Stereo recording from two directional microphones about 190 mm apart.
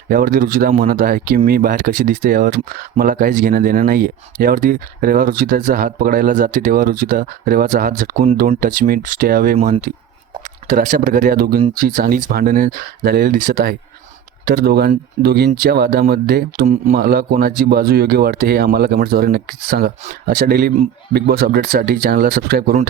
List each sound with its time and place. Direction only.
0.1 s speech: 50° right (ahead or behind)